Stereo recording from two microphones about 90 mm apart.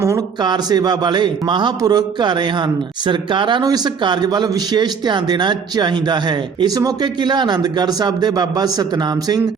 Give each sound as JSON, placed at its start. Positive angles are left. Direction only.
{"t": 0.0, "sound": "a sound", "side_deg": -35}
{"t": 0.4, "sound": "a man's voice", "side_deg": -50}
{"t": 3.6, "sound": "a man's voice", "side_deg": -50}